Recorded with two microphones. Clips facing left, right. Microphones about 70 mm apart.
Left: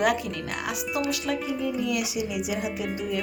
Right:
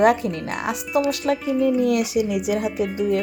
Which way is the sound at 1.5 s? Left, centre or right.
Right.